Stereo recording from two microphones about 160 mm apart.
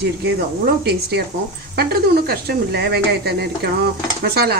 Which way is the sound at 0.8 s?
90° right.